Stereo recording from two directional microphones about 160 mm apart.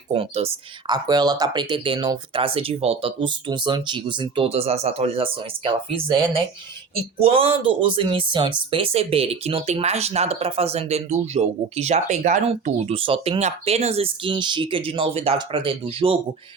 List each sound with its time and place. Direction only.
0.1 s speech: 35° right (ahead or behind)
0.9 s speech: 25° right (ahead or behind)